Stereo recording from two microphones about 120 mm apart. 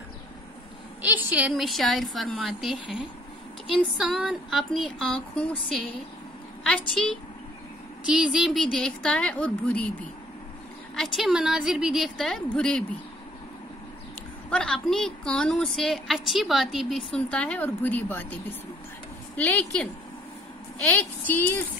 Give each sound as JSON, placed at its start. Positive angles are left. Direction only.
{"t": 1.0, "sound": "a sound", "side_deg": -15}
{"t": 1.5, "sound": "a woman's voice", "side_deg": 0}
{"t": 5.1, "sound": "a woman's voice", "side_deg": 10}
{"t": 8.0, "sound": "a woman's voice", "side_deg": -5}
{"t": 11.0, "sound": "a woman's voice", "side_deg": 0}
{"t": 14.5, "sound": "a woman's voice", "side_deg": 5}
{"t": 17.1, "sound": "a woman's voice", "side_deg": 10}